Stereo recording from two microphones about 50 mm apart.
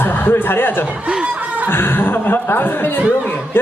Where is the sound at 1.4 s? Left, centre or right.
Right.